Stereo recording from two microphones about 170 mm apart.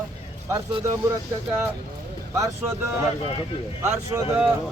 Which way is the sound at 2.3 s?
15° right (ahead or behind).